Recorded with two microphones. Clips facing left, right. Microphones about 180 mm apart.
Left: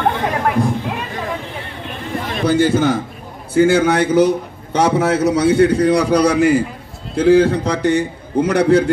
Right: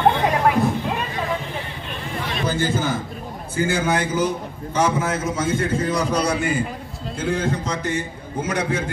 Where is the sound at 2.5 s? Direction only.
70° left (ahead or behind).